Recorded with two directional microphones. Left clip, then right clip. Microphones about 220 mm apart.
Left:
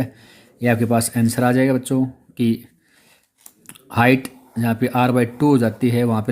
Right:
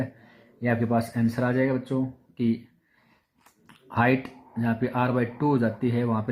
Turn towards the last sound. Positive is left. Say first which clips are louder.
# left 7 dB
turn(degrees=40)  # may be behind; listen again after turning